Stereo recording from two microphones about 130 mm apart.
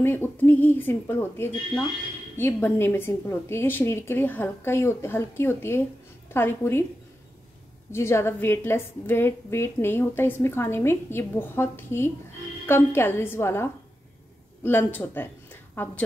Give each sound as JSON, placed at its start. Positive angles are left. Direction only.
{"t": 0.0, "sound": "a woman's voice", "side_deg": 15}
{"t": 7.9, "sound": "a woman's voice", "side_deg": 20}